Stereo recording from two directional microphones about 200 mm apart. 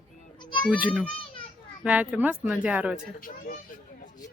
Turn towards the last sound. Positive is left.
turn(degrees=45)  # may be behind; listen again after turning